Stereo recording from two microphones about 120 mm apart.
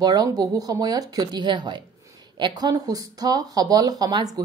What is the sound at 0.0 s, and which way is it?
Speech, 35° right (ahead or behind).